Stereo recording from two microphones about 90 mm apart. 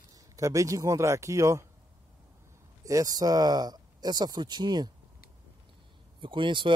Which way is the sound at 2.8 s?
40° right (ahead or behind).